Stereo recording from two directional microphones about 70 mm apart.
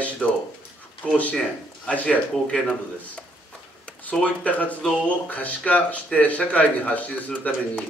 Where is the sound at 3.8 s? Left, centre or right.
Centre.